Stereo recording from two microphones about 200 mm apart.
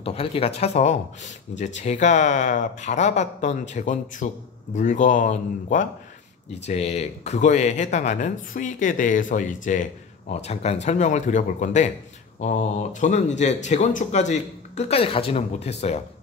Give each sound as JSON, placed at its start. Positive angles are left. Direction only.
{"t": 0.0, "sound": "speech", "side_deg": 30}